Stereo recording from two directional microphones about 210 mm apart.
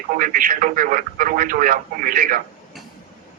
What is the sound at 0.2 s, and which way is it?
Speech, 40° right (ahead or behind).